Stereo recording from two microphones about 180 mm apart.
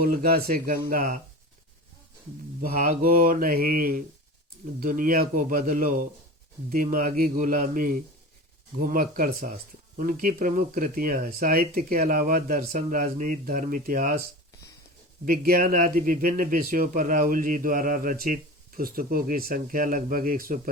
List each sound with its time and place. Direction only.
0.0 s speech: 55° right (ahead or behind)
2.6 s speech: 50° right (ahead or behind)
15.2 s speech: 55° right (ahead or behind)